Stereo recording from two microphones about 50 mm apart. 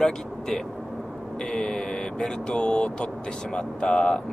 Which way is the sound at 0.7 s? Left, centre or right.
Centre.